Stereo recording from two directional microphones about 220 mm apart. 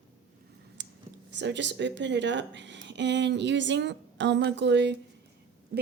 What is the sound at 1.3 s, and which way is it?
Speech, 55° right (ahead or behind).